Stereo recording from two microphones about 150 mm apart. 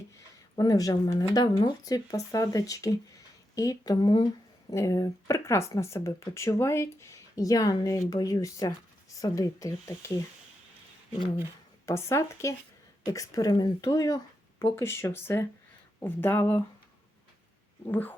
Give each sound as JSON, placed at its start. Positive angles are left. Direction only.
{"t": 0.5, "sound": "speech", "side_deg": 25}
{"t": 11.9, "sound": "speech", "side_deg": 20}
{"t": 17.8, "sound": "speech", "side_deg": 10}